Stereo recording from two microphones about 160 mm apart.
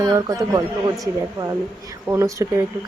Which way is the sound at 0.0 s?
20° right (ahead or behind).